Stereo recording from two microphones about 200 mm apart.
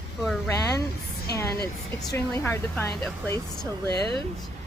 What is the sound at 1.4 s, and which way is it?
Speech, 15° left (ahead or behind).